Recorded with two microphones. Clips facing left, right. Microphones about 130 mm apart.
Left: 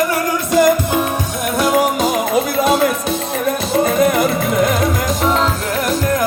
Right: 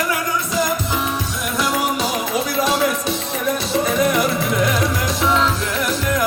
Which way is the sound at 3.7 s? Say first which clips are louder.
Left 4 dB; 45° left (ahead or behind).